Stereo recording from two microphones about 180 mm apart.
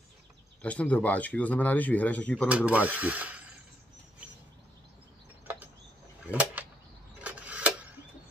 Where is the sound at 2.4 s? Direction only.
5° right (ahead or behind).